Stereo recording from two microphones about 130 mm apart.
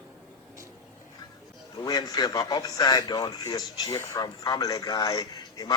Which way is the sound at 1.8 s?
30° left (ahead or behind).